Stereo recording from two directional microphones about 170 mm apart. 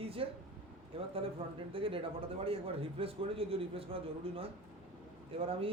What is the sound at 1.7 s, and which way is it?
A man's voice, 30° right (ahead or behind).